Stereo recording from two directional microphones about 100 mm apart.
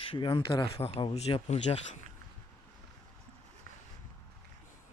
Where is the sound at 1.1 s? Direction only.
90° left.